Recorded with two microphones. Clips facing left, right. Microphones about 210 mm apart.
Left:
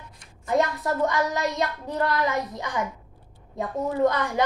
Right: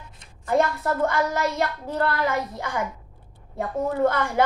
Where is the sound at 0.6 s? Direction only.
20° left (ahead or behind).